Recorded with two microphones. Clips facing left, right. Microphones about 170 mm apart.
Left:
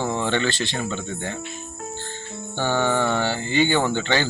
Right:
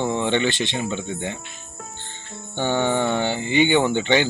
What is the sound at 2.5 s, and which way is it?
Speech, 20° right (ahead or behind).